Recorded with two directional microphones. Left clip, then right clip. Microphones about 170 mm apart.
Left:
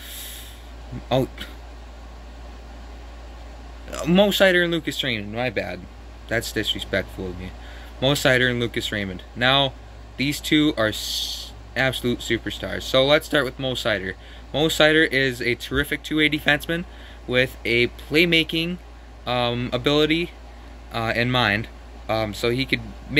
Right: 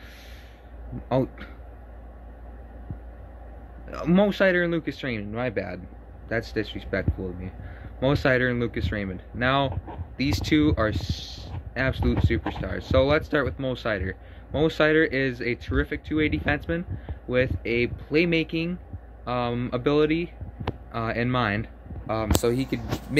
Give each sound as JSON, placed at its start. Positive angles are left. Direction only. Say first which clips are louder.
{"t": 0.0, "sound": "snort", "louder": "left 9 dB", "side_deg": -10}
{"t": 1.0, "sound": "speech", "louder": "left 3 dB", "side_deg": -10}
{"t": 3.9, "sound": "speech", "louder": "left 4 dB", "side_deg": -10}